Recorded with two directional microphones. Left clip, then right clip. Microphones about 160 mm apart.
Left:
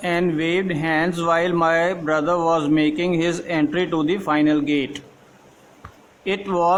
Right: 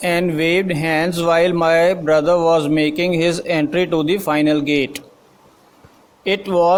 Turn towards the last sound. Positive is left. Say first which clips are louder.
# right 4 dB
turn(degrees=-30)  # may be behind; listen again after turning